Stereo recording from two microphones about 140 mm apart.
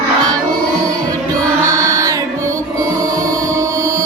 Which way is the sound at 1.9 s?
25° right (ahead or behind).